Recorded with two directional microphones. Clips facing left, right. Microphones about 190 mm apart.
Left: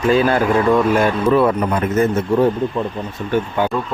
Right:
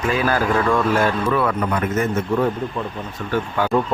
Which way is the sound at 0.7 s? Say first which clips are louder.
Left 4 dB; 20° left (ahead or behind).